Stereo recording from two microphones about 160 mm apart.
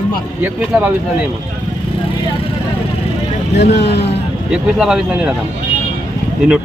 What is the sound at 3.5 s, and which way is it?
Speech, 90° left.